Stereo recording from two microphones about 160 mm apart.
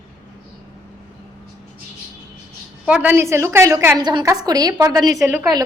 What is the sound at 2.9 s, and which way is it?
A woman's voice, 10° right (ahead or behind).